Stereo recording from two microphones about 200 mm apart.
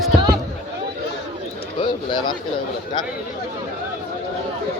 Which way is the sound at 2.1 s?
25° left (ahead or behind).